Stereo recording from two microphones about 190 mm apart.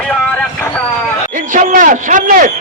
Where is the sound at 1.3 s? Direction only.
45° right (ahead or behind).